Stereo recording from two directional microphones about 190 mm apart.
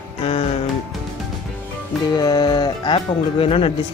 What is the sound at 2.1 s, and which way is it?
Speech, 20° left (ahead or behind).